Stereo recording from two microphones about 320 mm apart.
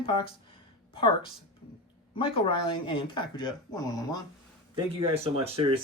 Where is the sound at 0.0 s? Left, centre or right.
Centre.